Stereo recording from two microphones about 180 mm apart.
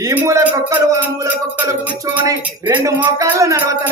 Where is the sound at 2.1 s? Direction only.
15° right (ahead or behind).